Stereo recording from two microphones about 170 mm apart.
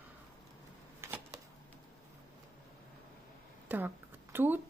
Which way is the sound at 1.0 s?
15° right (ahead or behind).